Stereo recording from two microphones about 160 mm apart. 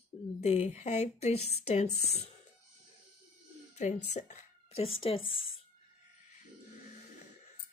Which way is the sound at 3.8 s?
45° left (ahead or behind).